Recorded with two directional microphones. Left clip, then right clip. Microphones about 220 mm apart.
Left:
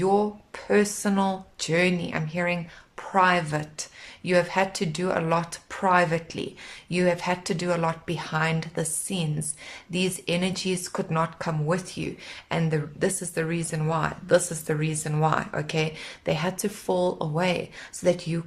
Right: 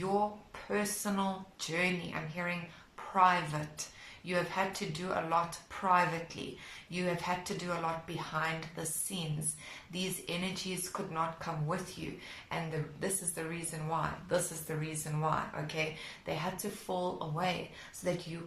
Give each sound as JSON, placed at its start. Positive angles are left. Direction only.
{"t": 0.7, "sound": "speech", "side_deg": 45}